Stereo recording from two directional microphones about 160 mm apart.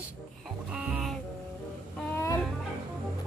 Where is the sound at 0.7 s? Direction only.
5° right (ahead or behind).